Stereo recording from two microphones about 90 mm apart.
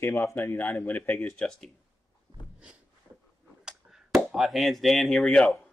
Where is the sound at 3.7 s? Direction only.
5° right (ahead or behind).